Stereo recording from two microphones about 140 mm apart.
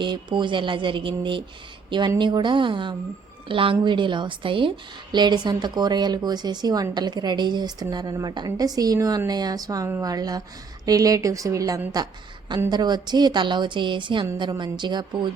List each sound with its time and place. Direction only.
0.0 s a woman's voice: 35° right (ahead or behind)